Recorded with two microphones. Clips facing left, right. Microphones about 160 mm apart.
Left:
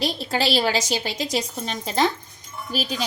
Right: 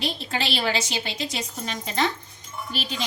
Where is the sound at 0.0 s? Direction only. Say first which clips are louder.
Left 5 dB; 35° left (ahead or behind).